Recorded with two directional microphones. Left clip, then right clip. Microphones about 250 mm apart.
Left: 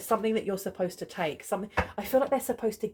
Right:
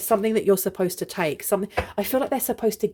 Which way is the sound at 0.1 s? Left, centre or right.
Right.